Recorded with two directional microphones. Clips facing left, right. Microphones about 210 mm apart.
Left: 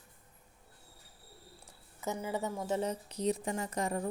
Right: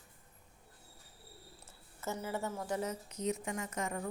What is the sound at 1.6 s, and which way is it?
A woman's voice, 15° left (ahead or behind).